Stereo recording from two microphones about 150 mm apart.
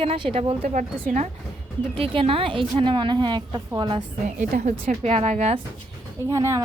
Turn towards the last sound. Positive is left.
turn(degrees=-20)  # may be behind; listen again after turning